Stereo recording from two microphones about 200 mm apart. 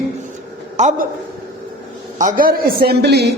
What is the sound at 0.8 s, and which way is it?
Speech, 40° right (ahead or behind).